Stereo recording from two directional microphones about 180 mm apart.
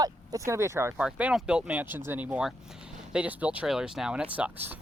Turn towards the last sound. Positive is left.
turn(degrees=-10)  # may be behind; listen again after turning